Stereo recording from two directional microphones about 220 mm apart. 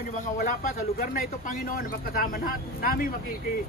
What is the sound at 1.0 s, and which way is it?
Speech, 40° left (ahead or behind).